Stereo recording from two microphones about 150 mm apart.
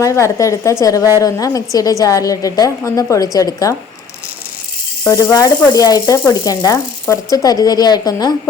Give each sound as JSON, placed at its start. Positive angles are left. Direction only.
{"t": 0.0, "sound": "a woman's voice", "side_deg": 20}
{"t": 5.0, "sound": "a woman's voice", "side_deg": 20}